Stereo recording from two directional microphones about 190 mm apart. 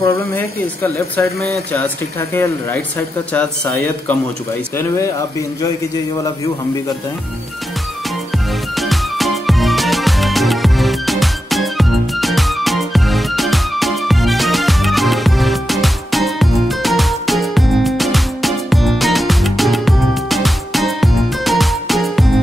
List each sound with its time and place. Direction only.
0.0 s speech: 15° left (ahead or behind)
1.2 s speech: 55° right (ahead or behind)
1.7 s speech: 10° left (ahead or behind)
8.7 s music: centre (ahead or behind)